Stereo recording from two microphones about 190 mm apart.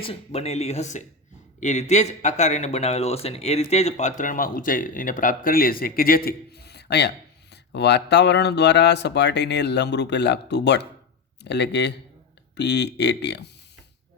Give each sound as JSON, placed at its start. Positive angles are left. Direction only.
{"t": 0.0, "sound": "speech", "side_deg": 30}